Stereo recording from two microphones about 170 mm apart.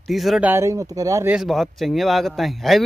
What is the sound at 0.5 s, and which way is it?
Speech, 20° right (ahead or behind).